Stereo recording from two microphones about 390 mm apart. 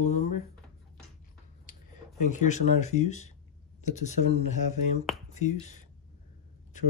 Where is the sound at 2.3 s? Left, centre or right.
Centre.